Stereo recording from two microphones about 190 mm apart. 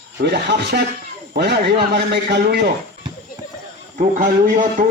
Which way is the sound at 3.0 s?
25° right (ahead or behind).